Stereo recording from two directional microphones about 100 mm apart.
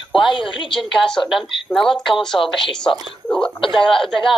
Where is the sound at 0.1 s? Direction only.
55° left (ahead or behind).